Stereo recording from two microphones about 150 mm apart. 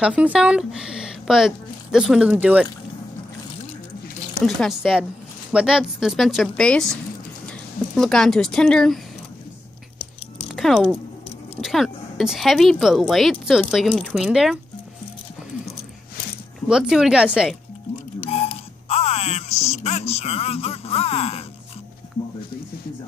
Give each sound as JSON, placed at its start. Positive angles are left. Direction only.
{"t": 0.0, "sound": "speech", "side_deg": -5}
{"t": 4.4, "sound": "speech", "side_deg": 0}
{"t": 10.5, "sound": "speech", "side_deg": 0}
{"t": 16.6, "sound": "speech", "side_deg": -5}
{"t": 18.3, "sound": "a sound", "side_deg": 40}